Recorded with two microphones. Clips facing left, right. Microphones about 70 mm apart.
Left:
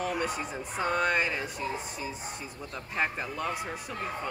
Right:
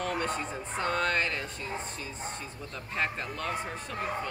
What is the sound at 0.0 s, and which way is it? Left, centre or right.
Speech, centre.